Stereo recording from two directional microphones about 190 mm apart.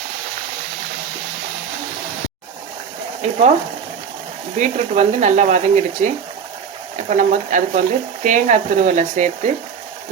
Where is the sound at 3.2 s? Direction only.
35° right (ahead or behind).